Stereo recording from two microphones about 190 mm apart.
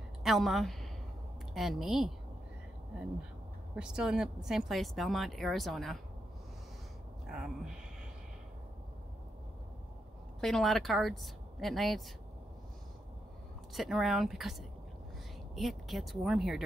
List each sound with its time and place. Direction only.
0.2 s a woman's voice: centre (ahead or behind)
3.7 s speech: 5° right (ahead or behind)
7.2 s speech: 5° right (ahead or behind)
10.4 s speech: centre (ahead or behind)
13.7 s speech: centre (ahead or behind)